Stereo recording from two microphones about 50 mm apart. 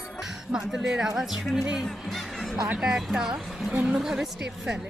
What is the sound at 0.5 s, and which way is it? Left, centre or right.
Speech, centre.